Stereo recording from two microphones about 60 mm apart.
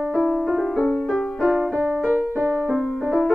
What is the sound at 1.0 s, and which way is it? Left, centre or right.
Music, centre.